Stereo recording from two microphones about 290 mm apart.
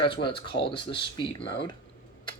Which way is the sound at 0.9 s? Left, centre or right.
Centre.